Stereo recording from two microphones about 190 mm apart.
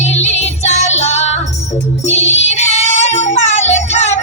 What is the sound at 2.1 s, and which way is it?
Child singing, 35° left (ahead or behind).